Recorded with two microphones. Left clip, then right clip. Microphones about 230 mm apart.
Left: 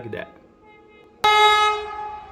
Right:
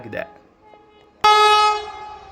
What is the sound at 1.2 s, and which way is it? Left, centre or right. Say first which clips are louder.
Music: right 2 dB; right.